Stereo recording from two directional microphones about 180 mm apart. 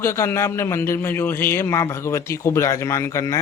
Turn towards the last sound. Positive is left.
turn(degrees=15)  # may be behind; listen again after turning